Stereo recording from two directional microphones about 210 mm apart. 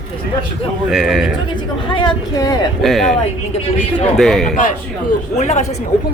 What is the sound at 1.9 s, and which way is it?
Speech, 20° left (ahead or behind).